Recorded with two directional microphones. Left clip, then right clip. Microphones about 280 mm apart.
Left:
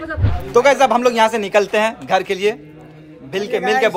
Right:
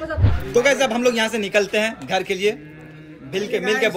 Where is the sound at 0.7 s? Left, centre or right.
Left.